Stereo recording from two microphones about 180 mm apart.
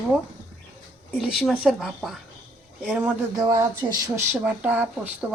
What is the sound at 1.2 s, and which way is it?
Speech, centre (ahead or behind).